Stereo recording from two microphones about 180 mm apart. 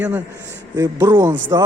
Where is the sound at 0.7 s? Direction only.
20° right (ahead or behind).